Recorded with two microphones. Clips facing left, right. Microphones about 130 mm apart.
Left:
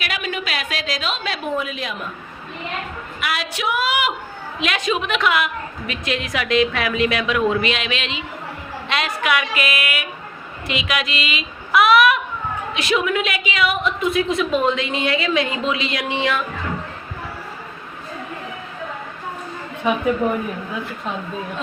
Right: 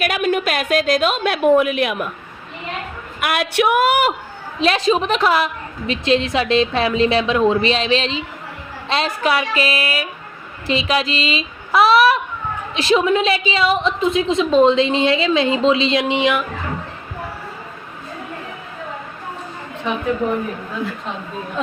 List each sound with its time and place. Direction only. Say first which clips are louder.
0.0 s a woman's voice: right 8 dB; 50° right (ahead or behind)
3.2 s a woman's voice: right 8 dB; 55° right (ahead or behind)
4.6 s a woman's voice: right 6 dB; 30° right (ahead or behind)